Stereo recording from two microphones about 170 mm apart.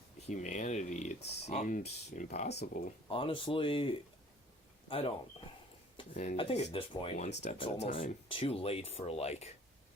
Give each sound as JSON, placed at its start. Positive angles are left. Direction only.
{"t": 0.3, "sound": "speech", "side_deg": 45}
{"t": 2.5, "sound": "speech", "side_deg": 80}
{"t": 3.1, "sound": "speech", "side_deg": 30}